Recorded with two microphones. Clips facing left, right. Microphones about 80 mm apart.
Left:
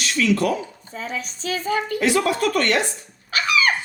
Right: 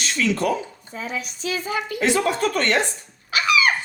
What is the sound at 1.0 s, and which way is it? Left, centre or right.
Speech, left.